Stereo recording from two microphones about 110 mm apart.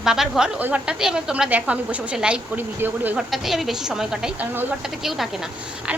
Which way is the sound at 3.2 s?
Centre (ahead or behind).